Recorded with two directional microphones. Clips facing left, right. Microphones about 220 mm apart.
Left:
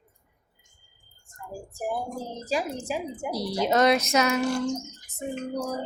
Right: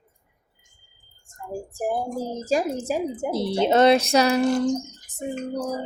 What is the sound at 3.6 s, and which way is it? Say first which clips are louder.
Speech: right 4 dB; 30° right (ahead or behind).